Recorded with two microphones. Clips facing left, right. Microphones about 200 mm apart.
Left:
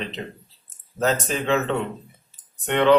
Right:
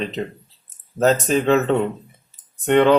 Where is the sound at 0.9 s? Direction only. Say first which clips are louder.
Right 6 dB; 40° right (ahead or behind).